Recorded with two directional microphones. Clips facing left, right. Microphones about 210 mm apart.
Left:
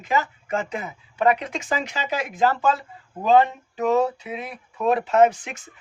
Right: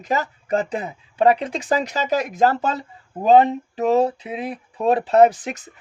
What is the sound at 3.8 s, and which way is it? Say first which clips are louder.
Speech: right 2 dB; 35° right (ahead or behind).